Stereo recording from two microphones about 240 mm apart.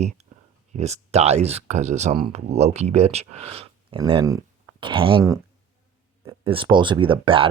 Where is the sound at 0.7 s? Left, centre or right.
Right.